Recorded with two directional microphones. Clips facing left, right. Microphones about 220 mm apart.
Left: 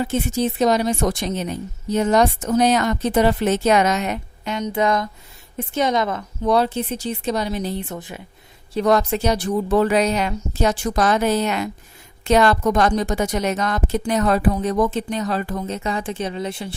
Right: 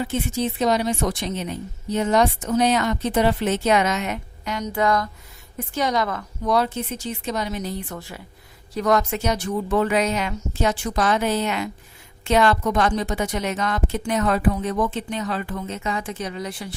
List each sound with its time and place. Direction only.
0.0 s a woman's voice: 40° left (ahead or behind)
4.5 s a woman's voice: 20° left (ahead or behind)
8.7 s a woman's voice: 30° left (ahead or behind)